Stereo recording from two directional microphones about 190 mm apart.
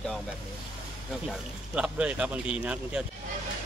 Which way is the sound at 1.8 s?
5° right (ahead or behind).